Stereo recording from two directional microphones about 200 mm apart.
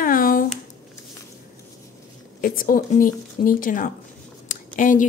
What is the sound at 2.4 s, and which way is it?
A woman's voice, 45° left (ahead or behind).